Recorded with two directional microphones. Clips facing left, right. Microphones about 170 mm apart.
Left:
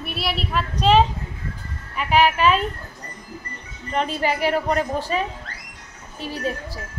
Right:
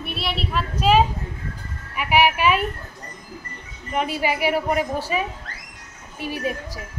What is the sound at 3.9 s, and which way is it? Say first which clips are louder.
Speech: even; 10° right (ahead or behind).